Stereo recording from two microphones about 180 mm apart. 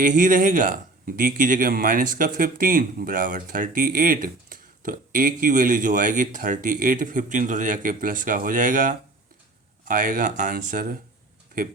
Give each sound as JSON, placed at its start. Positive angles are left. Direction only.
{"t": 0.0, "sound": "a man's voice", "side_deg": -50}